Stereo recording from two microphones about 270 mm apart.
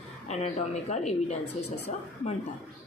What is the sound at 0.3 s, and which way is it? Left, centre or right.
Speech, left.